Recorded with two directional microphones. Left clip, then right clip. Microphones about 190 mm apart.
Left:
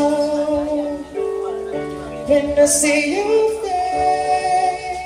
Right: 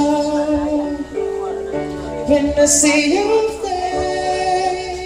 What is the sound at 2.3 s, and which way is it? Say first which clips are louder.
Music: even; 45° left (ahead or behind).